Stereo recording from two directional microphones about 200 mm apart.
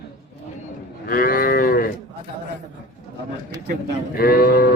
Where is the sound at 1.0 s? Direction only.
45° left (ahead or behind).